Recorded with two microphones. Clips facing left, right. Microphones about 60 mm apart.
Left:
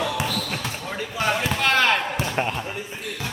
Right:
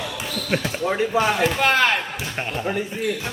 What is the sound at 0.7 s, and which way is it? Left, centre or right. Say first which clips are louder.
Speech: right 8 dB; right.